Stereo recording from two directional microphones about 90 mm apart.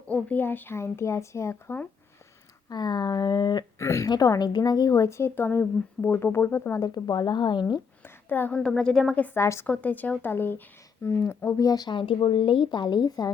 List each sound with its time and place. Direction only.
0.1 s a woman's voice: 20° left (ahead or behind)
2.6 s speech: 50° left (ahead or behind)
3.8 s speech: 35° left (ahead or behind)
4.1 s a woman's voice: 45° left (ahead or behind); by 6.7 s 30° left (ahead or behind)
6.7 s speech: 45° left (ahead or behind)
8.0 s a sound: 20° left (ahead or behind)
8.5 s a woman's voice: 10° left (ahead or behind)
9.1 s a woman's voice: 20° left (ahead or behind)
9.4 s speech: 30° left (ahead or behind)
9.6 s a woman's voice: 15° left (ahead or behind); by 11.9 s 40° left (ahead or behind)
11.9 s a woman's voice: 65° left (ahead or behind); by 13.3 s 50° left (ahead or behind)